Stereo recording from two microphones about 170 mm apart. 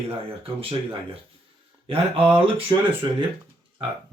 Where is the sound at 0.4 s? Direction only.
35° right (ahead or behind).